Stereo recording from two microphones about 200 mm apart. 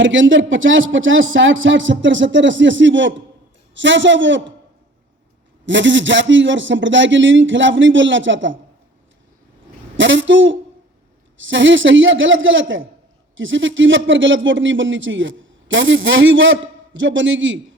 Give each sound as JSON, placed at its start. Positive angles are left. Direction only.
{"t": 0.0, "sound": "a man's voice", "side_deg": -70}
{"t": 5.6, "sound": "a man's voice", "side_deg": -65}
{"t": 10.0, "sound": "a man's voice", "side_deg": -70}